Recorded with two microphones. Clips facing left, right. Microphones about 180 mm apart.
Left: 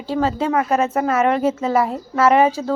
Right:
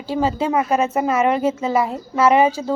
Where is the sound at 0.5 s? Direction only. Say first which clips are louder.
Even; 15° right (ahead or behind).